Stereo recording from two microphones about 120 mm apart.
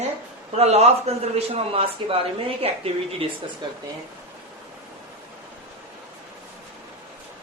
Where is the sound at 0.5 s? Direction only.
60° right (ahead or behind).